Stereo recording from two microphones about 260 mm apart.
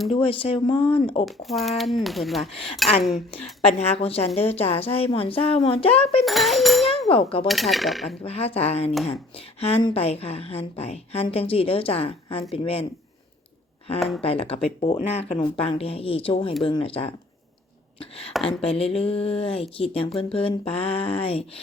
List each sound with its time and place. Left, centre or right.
0.1 s a woman's voice: centre
1.2 s speech: centre
3.6 s a woman's voice: left
6.2 s speech: centre
7.1 s a woman's voice: left
7.4 s speech: centre
8.2 s a woman's voice: left
14.2 s a woman's voice: left
18.6 s a woman's voice: left